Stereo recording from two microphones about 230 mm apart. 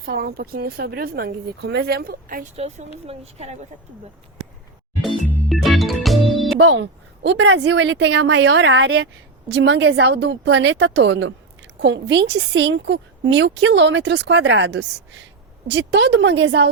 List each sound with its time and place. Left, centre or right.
0.0 s a woman's voice: right
5.5 s music: centre
6.6 s a woman's voice: right